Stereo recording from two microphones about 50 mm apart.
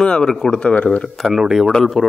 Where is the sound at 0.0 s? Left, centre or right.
Centre.